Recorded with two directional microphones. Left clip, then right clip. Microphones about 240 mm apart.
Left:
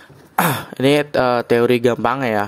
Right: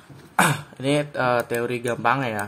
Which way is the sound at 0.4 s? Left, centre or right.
Left.